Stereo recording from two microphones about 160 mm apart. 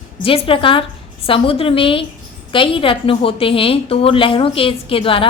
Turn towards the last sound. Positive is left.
turn(degrees=35)  # may be behind; listen again after turning